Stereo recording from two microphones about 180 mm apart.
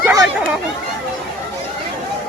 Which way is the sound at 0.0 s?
20° right (ahead or behind).